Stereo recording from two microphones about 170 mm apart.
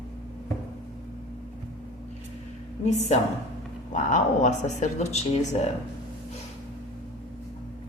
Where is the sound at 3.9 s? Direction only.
45° left (ahead or behind).